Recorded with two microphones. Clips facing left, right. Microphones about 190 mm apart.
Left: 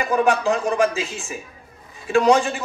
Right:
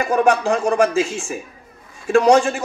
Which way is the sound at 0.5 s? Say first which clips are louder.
Right 2 dB; 50° right (ahead or behind).